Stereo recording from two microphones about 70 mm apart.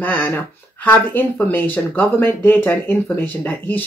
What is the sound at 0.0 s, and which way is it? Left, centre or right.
Speech, left.